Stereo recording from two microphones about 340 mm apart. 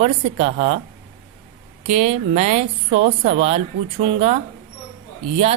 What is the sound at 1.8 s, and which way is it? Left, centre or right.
A woman's voice, centre.